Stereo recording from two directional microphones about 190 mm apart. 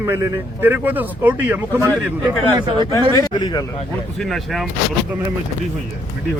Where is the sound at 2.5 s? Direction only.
25° right (ahead or behind).